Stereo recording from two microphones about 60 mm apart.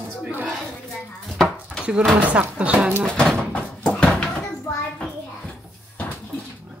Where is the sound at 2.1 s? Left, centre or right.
Right.